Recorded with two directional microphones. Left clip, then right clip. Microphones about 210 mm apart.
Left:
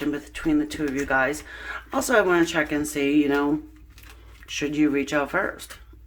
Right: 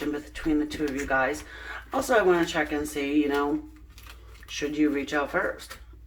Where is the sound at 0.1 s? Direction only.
45° left (ahead or behind).